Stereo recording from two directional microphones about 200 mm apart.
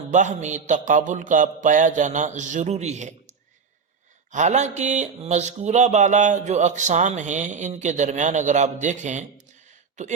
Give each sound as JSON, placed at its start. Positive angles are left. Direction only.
{"t": 0.1, "sound": "speech", "side_deg": -35}